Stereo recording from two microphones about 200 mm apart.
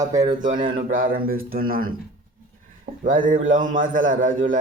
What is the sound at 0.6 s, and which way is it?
Speech, 45° right (ahead or behind).